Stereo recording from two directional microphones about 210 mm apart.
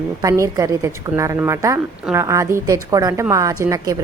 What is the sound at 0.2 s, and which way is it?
A woman's voice, 15° right (ahead or behind).